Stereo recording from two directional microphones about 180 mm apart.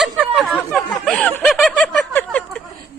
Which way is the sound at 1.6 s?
5° left (ahead or behind).